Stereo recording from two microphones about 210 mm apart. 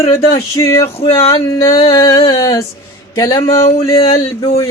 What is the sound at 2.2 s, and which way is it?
Music, 25° left (ahead or behind).